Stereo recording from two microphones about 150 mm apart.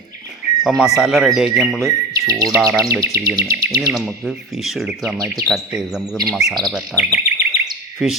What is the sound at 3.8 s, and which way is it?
Speech, centre (ahead or behind).